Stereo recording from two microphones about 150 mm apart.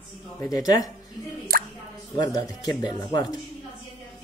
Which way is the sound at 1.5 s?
75° right (ahead or behind).